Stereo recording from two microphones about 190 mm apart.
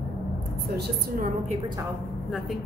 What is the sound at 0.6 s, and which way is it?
Speech, 60° right (ahead or behind).